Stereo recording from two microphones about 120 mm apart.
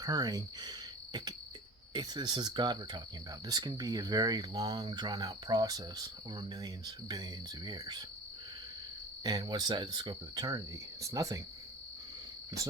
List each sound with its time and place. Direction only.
0.0 s cricket: 35° right (ahead or behind)
1.9 s speech: 35° right (ahead or behind)
9.2 s speech: 35° right (ahead or behind)
11.0 s cricket: 30° right (ahead or behind)